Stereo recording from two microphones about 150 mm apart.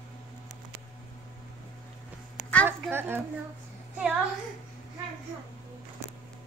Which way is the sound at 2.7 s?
15° right (ahead or behind).